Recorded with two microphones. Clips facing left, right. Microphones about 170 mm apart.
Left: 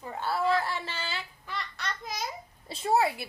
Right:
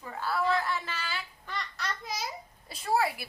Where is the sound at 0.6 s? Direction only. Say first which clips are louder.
Left 1 dB; 30° left (ahead or behind).